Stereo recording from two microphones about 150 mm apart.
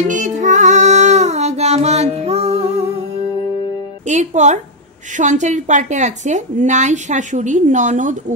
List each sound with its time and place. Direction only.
0.1 s music: 55° right (ahead or behind)
4.0 s a woman's voice: 50° right (ahead or behind)